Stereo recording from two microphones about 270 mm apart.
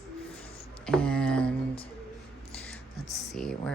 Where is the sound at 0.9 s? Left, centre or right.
Centre.